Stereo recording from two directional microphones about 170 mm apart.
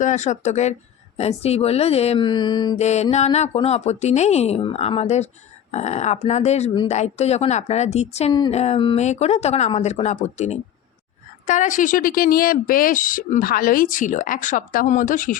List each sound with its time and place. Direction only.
0.0 s a woman's voice: 45° left (ahead or behind); by 2.7 s 25° left (ahead or behind)
2.7 s a woman's voice: 40° left (ahead or behind)